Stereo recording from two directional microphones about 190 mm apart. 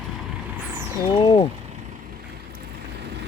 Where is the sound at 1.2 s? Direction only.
30° left (ahead or behind).